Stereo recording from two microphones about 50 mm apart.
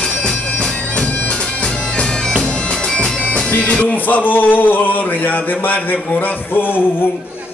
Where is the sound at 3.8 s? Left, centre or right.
Left.